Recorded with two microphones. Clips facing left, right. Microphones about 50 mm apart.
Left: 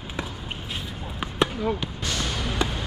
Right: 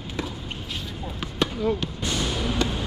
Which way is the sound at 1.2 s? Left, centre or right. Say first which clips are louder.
Left 1 dB; centre.